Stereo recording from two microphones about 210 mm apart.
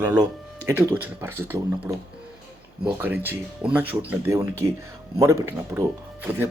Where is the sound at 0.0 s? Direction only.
15° right (ahead or behind).